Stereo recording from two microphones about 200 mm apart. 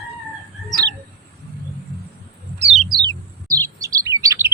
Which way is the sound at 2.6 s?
30° right (ahead or behind).